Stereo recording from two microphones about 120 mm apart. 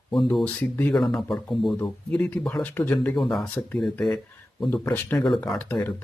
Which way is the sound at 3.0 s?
Centre (ahead or behind).